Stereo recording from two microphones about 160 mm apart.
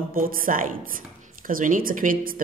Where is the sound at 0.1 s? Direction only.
60° right (ahead or behind).